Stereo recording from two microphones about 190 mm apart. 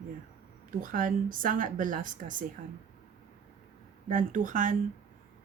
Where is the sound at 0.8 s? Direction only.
45° right (ahead or behind).